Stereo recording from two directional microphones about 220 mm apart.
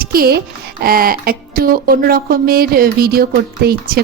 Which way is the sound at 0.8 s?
40° right (ahead or behind).